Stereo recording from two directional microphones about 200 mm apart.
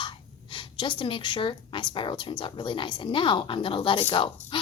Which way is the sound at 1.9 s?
25° left (ahead or behind).